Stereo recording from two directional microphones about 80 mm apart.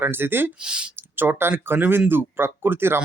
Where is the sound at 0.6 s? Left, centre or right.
Centre.